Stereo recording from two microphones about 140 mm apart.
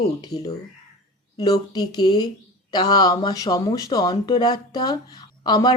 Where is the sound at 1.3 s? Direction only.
25° left (ahead or behind).